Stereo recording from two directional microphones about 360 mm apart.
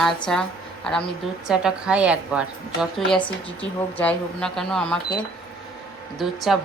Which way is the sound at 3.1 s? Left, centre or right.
Centre.